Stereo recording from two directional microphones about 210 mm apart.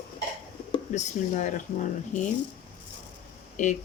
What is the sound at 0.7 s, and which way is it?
Speech, 35° left (ahead or behind).